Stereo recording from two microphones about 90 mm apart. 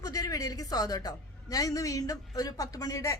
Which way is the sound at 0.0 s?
40° left (ahead or behind).